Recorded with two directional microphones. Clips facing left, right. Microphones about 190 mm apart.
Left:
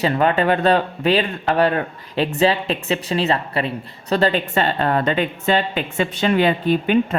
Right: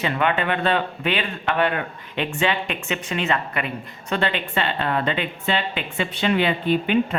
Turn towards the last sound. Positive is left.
turn(degrees=40)  # may be behind; listen again after turning